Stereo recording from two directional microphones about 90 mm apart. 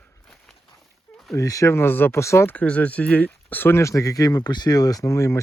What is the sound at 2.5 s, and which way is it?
Speech, 15° left (ahead or behind).